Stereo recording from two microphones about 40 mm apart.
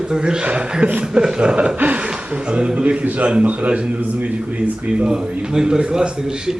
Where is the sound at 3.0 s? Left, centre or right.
Right.